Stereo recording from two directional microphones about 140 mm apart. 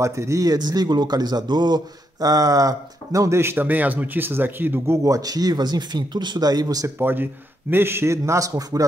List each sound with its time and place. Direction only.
0.0 s a man's voice: 20° right (ahead or behind)